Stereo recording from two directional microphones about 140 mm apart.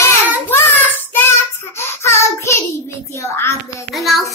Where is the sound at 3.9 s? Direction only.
Centre (ahead or behind).